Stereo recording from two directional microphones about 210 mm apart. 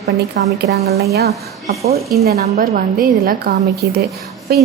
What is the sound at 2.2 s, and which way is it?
A woman's voice, 50° right (ahead or behind).